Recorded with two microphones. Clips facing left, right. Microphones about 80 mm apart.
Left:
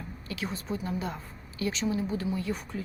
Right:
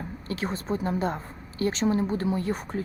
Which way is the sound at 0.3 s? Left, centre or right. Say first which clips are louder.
Right 5 dB; right.